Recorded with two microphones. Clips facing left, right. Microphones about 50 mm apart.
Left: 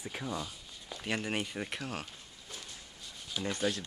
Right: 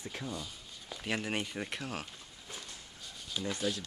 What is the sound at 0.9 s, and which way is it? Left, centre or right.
Speech, centre.